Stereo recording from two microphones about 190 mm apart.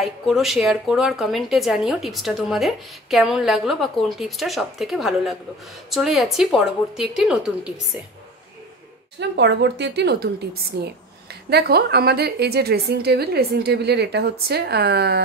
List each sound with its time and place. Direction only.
0.0 s a woman's voice: centre (ahead or behind)
9.2 s a woman's voice: 65° right (ahead or behind)